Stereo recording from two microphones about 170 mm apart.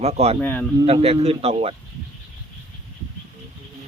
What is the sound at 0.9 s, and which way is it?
Speech, 35° right (ahead or behind).